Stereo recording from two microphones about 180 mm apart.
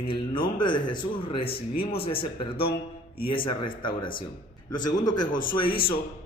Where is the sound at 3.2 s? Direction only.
30° left (ahead or behind).